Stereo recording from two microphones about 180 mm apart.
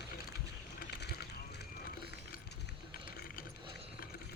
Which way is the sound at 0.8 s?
65° left (ahead or behind).